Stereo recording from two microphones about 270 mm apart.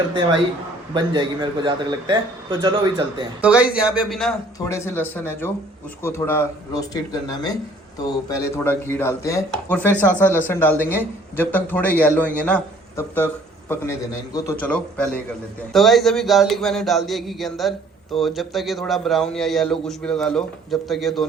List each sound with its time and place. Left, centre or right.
0.9 s a man's voice: centre
3.4 s a man's voice: centre